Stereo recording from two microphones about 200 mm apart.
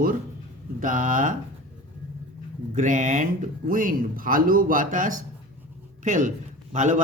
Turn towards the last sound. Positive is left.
turn(degrees=-40)  # may be behind; listen again after turning